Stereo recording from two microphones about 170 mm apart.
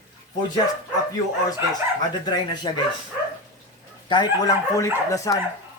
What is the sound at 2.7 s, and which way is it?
Speech, 25° left (ahead or behind).